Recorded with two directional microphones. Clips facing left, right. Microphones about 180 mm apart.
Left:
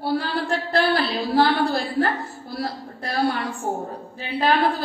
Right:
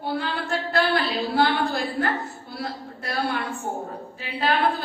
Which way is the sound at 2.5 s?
35° left (ahead or behind).